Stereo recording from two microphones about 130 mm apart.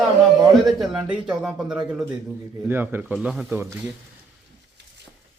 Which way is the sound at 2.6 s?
15° right (ahead or behind).